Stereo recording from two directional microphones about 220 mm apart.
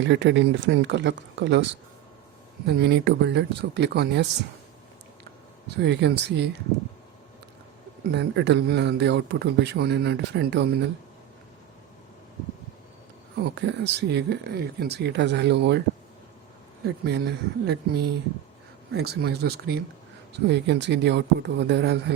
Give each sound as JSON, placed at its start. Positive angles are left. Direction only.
{"t": 0.0, "sound": "a man's voice", "side_deg": -55}
{"t": 2.6, "sound": "a man's voice", "side_deg": -45}
{"t": 5.6, "sound": "a man's voice", "side_deg": -50}
{"t": 8.1, "sound": "a man's voice", "side_deg": -50}
{"t": 13.6, "sound": "a man's voice", "side_deg": -55}
{"t": 16.8, "sound": "a man's voice", "side_deg": -50}